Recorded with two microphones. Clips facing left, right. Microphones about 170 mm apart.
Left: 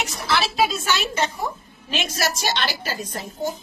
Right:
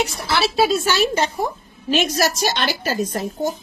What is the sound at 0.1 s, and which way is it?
A woman's voice, 35° right (ahead or behind).